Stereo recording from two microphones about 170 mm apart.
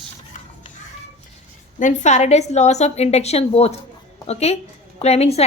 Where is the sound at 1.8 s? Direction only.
45° left (ahead or behind).